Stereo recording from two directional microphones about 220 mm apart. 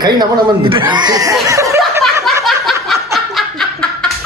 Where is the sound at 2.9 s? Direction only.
Centre (ahead or behind).